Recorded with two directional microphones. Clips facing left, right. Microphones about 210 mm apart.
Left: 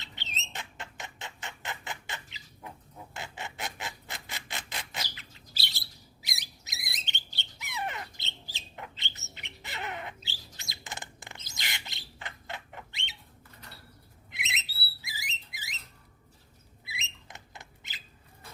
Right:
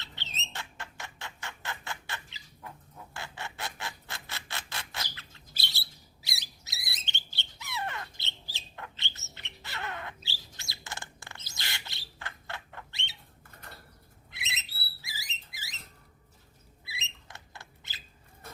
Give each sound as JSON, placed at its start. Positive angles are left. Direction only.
{"t": 0.0, "sound": "a sound", "side_deg": 15}
{"t": 14.3, "sound": "bird", "side_deg": 20}
{"t": 15.0, "sound": "rodents", "side_deg": 15}
{"t": 16.8, "sound": "rodents", "side_deg": 20}